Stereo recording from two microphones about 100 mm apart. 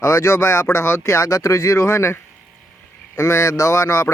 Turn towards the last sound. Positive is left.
turn(degrees=35)  # may be behind; listen again after turning